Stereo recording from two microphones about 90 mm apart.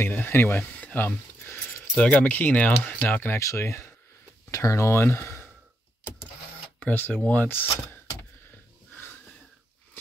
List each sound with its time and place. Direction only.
0.0 s speech: 25° left (ahead or behind)
3.3 s speech: 35° left (ahead or behind)
6.8 s speech: 20° left (ahead or behind)